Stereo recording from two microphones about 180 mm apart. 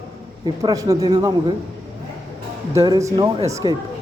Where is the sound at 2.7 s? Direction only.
20° right (ahead or behind).